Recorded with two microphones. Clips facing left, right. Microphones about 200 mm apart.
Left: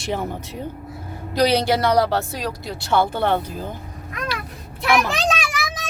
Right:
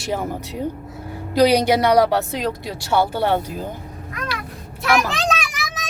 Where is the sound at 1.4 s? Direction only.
15° right (ahead or behind).